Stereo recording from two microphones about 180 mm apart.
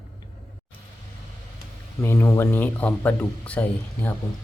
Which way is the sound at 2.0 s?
15° left (ahead or behind).